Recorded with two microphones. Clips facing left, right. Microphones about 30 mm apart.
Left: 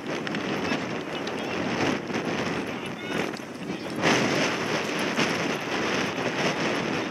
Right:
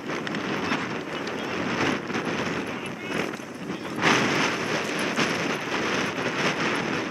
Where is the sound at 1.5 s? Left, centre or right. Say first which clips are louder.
Right 1 dB; centre.